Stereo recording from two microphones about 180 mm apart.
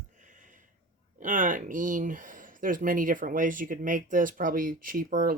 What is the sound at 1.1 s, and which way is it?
Speech, 45° right (ahead or behind).